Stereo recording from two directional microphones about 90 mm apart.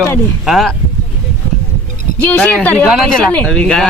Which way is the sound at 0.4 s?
Centre (ahead or behind).